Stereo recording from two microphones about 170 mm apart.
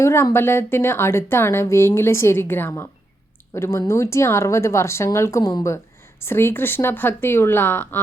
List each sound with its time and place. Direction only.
0.0 s a woman's voice: 15° left (ahead or behind)